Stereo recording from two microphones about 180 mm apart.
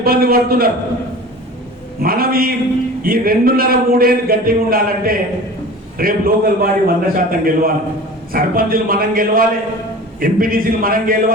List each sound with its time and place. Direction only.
0.0 s speech: 55° right (ahead or behind)
2.0 s a man's voice: 55° right (ahead or behind)